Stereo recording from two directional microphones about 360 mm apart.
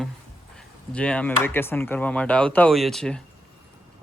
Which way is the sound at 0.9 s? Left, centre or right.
Centre.